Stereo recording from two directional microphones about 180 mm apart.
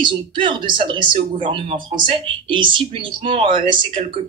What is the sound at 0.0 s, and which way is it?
Speech, 25° right (ahead or behind).